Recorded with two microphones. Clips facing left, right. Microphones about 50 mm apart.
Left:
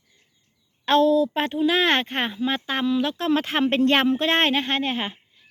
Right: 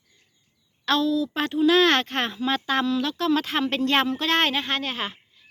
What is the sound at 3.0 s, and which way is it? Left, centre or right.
A woman's voice, left.